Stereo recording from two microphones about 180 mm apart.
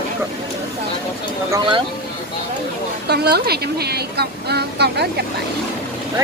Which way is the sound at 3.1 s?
65° right (ahead or behind).